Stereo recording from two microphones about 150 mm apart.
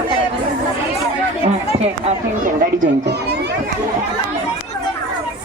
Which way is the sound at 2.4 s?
60° right (ahead or behind).